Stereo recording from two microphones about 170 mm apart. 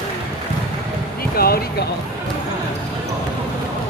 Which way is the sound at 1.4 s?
65° left (ahead or behind).